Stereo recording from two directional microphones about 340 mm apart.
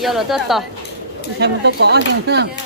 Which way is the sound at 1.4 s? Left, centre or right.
Right.